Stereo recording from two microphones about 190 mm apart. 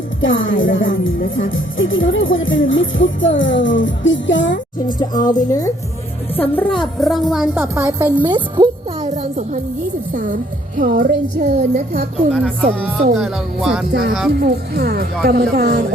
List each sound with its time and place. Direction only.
0.2 s speech: 90° left
4.9 s a woman's voice: 20° left (ahead or behind); by 8.3 s 10° right (ahead or behind)
8.5 s music: 35° right (ahead or behind)
10.1 s a woman's voice: 45° right (ahead or behind)
12.3 s a woman's voice: centre (ahead or behind)
12.6 s a woman's voice: 45° right (ahead or behind)
13.1 s a woman's voice: centre (ahead or behind)
14.3 s a woman's voice: 55° right (ahead or behind)